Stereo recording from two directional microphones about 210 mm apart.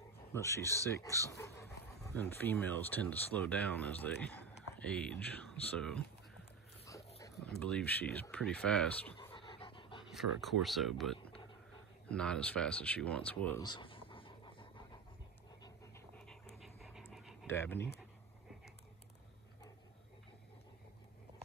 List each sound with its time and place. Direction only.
0.3 s speech: 10° left (ahead or behind)
7.4 s speech: 5° left (ahead or behind)
9.3 s dog: 25° left (ahead or behind)
10.1 s speech: centre (ahead or behind)
13.6 s pant: 20° left (ahead or behind)
16.3 s dog: centre (ahead or behind)
17.1 s a sound: centre (ahead or behind)
17.5 s speech: 10° left (ahead or behind)